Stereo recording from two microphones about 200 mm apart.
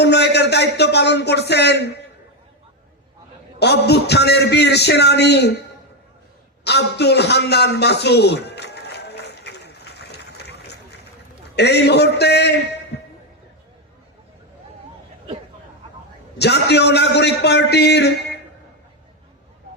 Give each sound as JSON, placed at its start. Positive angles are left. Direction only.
{"t": 0.0, "sound": "speech", "side_deg": 55}
{"t": 3.6, "sound": "a man's voice", "side_deg": 55}
{"t": 6.7, "sound": "a sound", "side_deg": 55}
{"t": 11.5, "sound": "a man's voice", "side_deg": 55}
{"t": 16.4, "sound": "a man's voice", "side_deg": 55}